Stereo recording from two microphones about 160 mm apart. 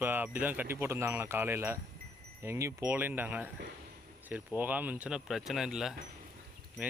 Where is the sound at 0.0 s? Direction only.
10° right (ahead or behind).